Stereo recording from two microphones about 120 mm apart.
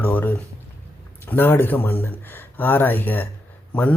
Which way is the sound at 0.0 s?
15° left (ahead or behind).